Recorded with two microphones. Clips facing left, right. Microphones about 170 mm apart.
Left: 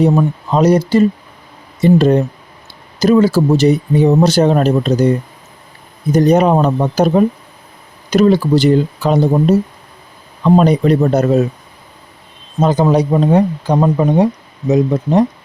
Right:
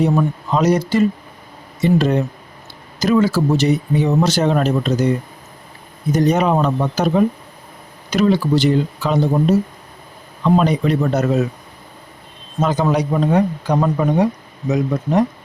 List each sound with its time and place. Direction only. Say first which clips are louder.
0.0 s speech: left 4 dB; 35° left (ahead or behind)
10.4 s speech: left 5 dB; 40° left (ahead or behind)
12.5 s a man's voice: left 5 dB; 35° left (ahead or behind)